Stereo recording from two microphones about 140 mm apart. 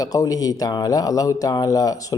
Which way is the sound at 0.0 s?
25° left (ahead or behind).